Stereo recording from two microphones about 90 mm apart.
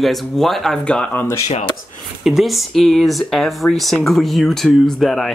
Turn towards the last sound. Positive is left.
turn(degrees=5)  # may be behind; listen again after turning